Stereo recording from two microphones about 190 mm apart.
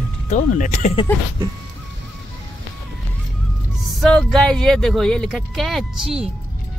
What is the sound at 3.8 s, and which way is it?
Speech, centre (ahead or behind).